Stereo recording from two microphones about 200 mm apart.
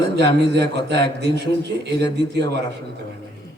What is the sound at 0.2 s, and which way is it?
A man's voice, 55° right (ahead or behind).